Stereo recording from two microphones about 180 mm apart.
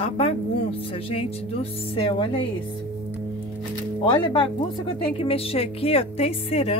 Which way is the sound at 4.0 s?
25° left (ahead or behind).